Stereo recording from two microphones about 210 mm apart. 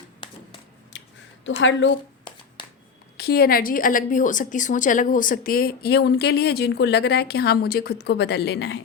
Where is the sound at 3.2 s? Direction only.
50° left (ahead or behind).